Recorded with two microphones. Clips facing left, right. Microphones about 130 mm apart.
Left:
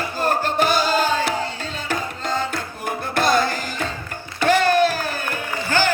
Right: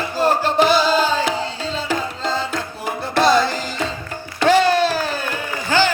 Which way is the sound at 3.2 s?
50° left (ahead or behind).